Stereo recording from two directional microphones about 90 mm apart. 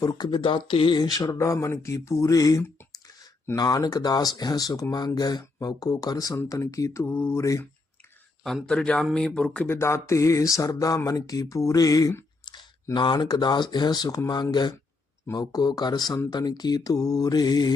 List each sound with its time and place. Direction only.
0.0 s speech: 50° left (ahead or behind)
0.9 s speech: 50° left (ahead or behind)
1.3 s speech: 35° left (ahead or behind)
8.6 s speech: 10° left (ahead or behind)
9.6 s speech: 30° left (ahead or behind)
12.5 s speech: 60° left (ahead or behind)